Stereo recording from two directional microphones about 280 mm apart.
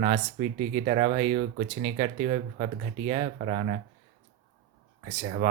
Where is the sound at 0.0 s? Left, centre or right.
Right.